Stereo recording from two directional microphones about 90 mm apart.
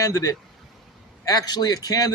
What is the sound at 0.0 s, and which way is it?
A man's voice, 40° left (ahead or behind).